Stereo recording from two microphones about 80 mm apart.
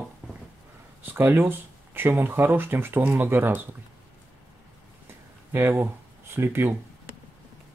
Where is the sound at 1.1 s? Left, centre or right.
Right.